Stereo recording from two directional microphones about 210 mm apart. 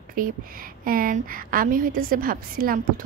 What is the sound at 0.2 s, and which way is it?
A woman's voice, 40° right (ahead or behind).